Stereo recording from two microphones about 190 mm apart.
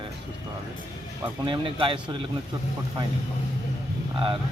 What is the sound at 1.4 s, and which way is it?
Speech, 25° right (ahead or behind).